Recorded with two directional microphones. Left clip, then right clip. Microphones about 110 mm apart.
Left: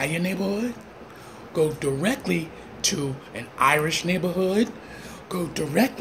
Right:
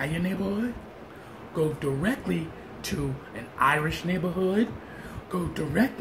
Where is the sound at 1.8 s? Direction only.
25° right (ahead or behind).